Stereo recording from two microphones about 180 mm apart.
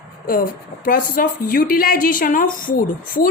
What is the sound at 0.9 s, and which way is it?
A woman's voice, 50° left (ahead or behind).